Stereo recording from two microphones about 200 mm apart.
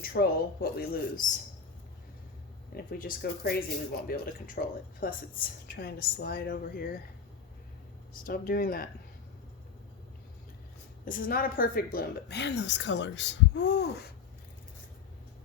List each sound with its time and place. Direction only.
0.0 s speech: 50° left (ahead or behind)
2.7 s speech: 45° left (ahead or behind)
8.2 s speech: 45° left (ahead or behind)
11.0 s a woman's voice: 45° left (ahead or behind)